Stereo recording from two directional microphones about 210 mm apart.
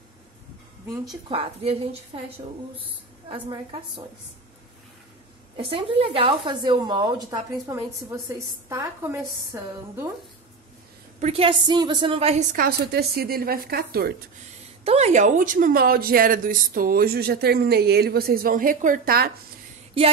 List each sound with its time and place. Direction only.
1.3 s a woman's voice: 30° right (ahead or behind)
5.6 s a woman's voice: 25° right (ahead or behind)
11.1 s a woman's voice: 30° right (ahead or behind); by 14.1 s 45° right (ahead or behind)
14.9 s a woman's voice: 30° right (ahead or behind)